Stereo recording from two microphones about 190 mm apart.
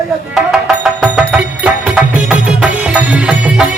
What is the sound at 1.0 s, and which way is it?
Music, 5° right (ahead or behind).